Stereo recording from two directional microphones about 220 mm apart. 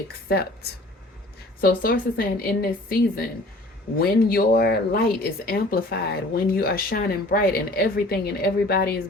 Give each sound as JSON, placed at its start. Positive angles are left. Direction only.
{"t": 0.3, "sound": "speech", "side_deg": 45}
{"t": 1.6, "sound": "speech", "side_deg": 40}